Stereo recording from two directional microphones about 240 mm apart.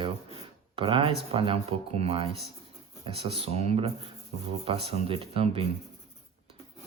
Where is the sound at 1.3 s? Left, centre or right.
Right.